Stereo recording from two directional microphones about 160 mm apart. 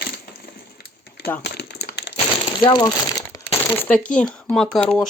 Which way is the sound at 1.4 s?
90° left.